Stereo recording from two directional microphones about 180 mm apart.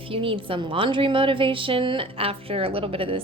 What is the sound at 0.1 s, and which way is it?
A woman's voice, 30° right (ahead or behind).